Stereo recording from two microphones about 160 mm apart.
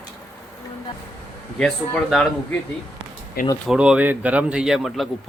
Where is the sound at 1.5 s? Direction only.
5° left (ahead or behind).